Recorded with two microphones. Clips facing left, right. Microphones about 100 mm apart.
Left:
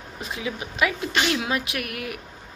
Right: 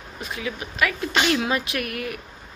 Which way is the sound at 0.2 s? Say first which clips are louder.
Even; 20° left (ahead or behind).